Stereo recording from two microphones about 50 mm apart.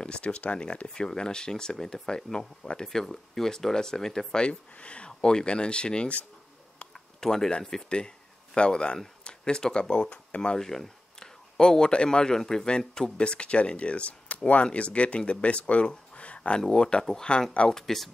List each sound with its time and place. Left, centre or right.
0.0 s speech: left
7.2 s a man's voice: centre
10.6 s speech: centre